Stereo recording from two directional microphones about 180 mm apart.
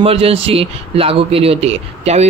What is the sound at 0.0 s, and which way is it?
A man's voice, 35° right (ahead or behind).